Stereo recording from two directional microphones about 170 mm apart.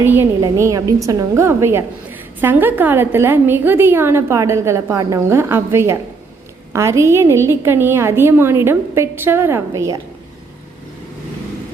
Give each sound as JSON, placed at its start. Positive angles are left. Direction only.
{"t": 0.0, "sound": "a woman's voice", "side_deg": -15}